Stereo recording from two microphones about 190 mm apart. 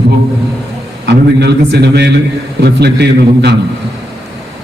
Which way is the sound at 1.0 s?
60° right (ahead or behind).